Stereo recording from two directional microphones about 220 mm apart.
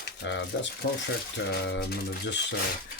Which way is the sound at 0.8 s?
45° left (ahead or behind).